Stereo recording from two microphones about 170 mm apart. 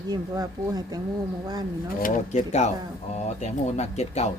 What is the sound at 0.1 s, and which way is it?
Speech, 25° right (ahead or behind).